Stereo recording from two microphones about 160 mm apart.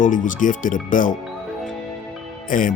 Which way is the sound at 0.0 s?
55° left (ahead or behind).